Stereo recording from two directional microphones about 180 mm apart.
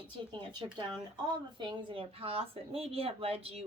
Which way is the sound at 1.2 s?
25° right (ahead or behind).